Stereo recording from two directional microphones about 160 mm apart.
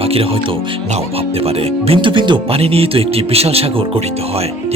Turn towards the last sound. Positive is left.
turn(degrees=-40)  # may be behind; listen again after turning